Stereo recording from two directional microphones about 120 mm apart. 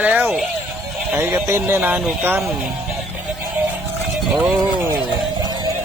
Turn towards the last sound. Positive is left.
turn(degrees=-10)  # may be behind; listen again after turning